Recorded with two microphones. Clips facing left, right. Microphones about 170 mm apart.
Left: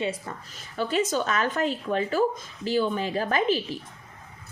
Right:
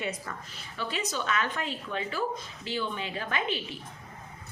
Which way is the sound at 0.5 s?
45° left (ahead or behind).